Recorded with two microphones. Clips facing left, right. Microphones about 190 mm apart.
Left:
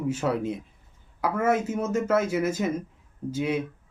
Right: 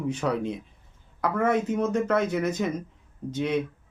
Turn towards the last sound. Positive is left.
turn(degrees=5)  # may be behind; listen again after turning